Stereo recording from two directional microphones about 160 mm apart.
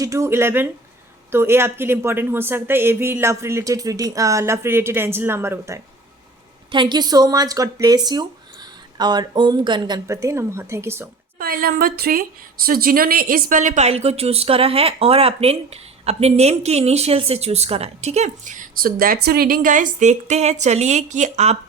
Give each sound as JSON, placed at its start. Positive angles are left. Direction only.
{"t": 0.0, "sound": "speech", "side_deg": -20}
{"t": 6.7, "sound": "a woman's voice", "side_deg": -30}
{"t": 11.3, "sound": "speech", "side_deg": -70}